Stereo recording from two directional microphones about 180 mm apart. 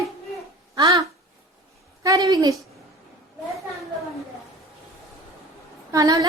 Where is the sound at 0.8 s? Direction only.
25° right (ahead or behind).